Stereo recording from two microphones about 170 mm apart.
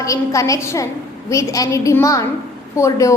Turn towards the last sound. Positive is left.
turn(degrees=20)  # may be behind; listen again after turning